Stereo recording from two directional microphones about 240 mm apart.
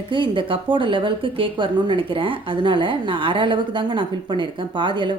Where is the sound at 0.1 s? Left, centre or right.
Right.